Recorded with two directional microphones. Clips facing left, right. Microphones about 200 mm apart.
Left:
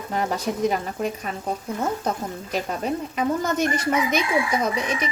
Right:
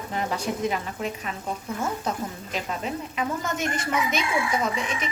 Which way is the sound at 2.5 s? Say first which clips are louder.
Left 6 dB; 40° left (ahead or behind).